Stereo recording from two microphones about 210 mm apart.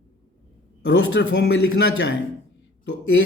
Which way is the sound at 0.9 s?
55° left (ahead or behind).